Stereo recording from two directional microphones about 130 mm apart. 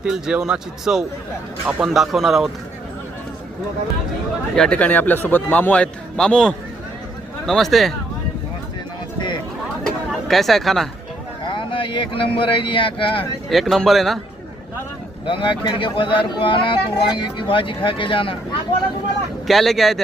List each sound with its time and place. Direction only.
0.0 s speech: 5° right (ahead or behind)
4.5 s a man's voice: 5° left (ahead or behind)
9.1 s a sound: 35° left (ahead or behind)
9.8 s chatter: centre (ahead or behind)
11.4 s speech: 40° left (ahead or behind)
13.5 s speech: centre (ahead or behind)
15.3 s speech: 40° left (ahead or behind)
19.5 s speech: centre (ahead or behind)